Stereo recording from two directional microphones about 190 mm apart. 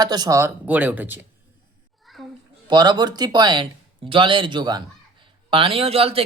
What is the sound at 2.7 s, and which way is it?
Speech, 20° right (ahead or behind).